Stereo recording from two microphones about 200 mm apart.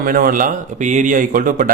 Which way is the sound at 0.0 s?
45° right (ahead or behind).